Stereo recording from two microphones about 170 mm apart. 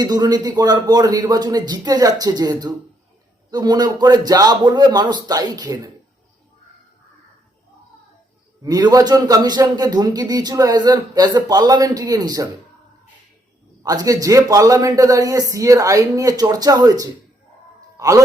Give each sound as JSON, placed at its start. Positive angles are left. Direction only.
{"t": 0.0, "sound": "a man's voice", "side_deg": -25}
{"t": 8.6, "sound": "a man's voice", "side_deg": -20}
{"t": 13.8, "sound": "a man's voice", "side_deg": -20}
{"t": 17.9, "sound": "a sound", "side_deg": -20}